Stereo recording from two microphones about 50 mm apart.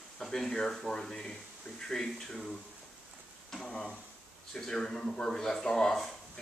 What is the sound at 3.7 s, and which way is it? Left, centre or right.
Speech, left.